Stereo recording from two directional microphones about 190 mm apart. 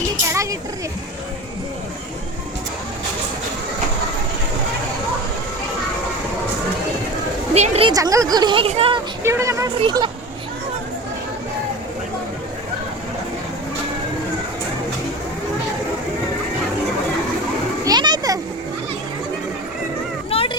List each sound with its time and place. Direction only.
7.5 s a sound: 35° right (ahead or behind)
7.9 s speech: 15° right (ahead or behind)
9.2 s speech: 15° right (ahead or behind)
17.8 s children playing: 20° right (ahead or behind)
20.3 s children playing: 30° left (ahead or behind)